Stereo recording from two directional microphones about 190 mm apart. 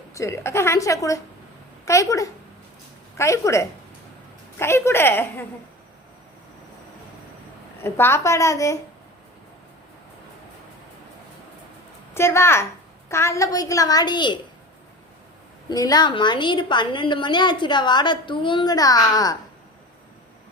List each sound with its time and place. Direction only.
0.1 s a woman's voice: 15° left (ahead or behind)
7.8 s a woman's voice: 10° left (ahead or behind)
12.1 s a woman's voice: 15° left (ahead or behind)
15.7 s a woman's voice: 20° left (ahead or behind)